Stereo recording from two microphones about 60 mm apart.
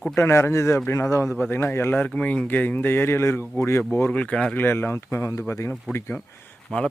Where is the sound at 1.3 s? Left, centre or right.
Left.